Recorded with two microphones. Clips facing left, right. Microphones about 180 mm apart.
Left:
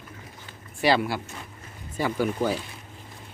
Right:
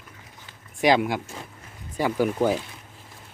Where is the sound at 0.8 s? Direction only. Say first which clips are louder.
Right 2 dB; 15° right (ahead or behind).